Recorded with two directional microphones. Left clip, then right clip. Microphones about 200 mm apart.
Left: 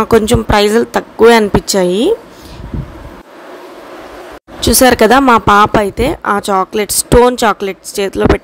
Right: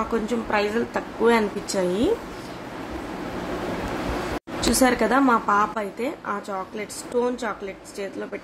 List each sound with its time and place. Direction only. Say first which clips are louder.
0.0 s speech: left 15 dB; 50° left (ahead or behind)
4.6 s speech: left 13 dB; 40° left (ahead or behind)